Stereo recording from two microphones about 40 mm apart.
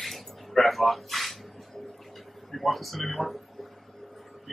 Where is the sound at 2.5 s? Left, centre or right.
Centre.